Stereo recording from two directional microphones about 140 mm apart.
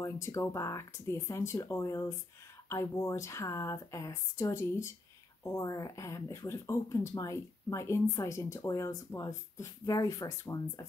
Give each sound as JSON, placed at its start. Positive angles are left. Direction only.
{"t": 0.0, "sound": "speech", "side_deg": 20}